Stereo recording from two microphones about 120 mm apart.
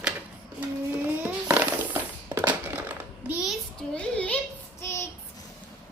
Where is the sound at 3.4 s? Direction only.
Centre (ahead or behind).